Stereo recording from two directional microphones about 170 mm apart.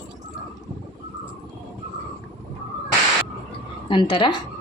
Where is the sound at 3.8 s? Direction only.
30° left (ahead or behind).